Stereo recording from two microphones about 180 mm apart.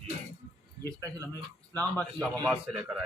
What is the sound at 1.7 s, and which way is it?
A man's voice, 5° left (ahead or behind).